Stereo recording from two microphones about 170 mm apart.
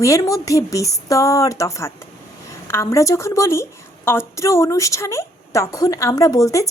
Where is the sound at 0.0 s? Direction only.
20° left (ahead or behind).